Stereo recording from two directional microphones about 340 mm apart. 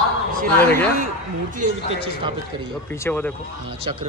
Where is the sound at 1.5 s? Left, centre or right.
Centre.